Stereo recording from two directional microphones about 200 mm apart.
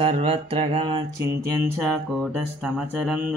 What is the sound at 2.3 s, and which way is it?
Speech, 5° right (ahead or behind).